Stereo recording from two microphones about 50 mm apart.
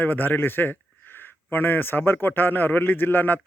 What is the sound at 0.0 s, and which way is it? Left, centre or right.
A man's voice, left.